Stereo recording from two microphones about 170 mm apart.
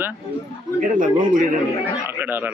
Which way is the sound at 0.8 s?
55° right (ahead or behind).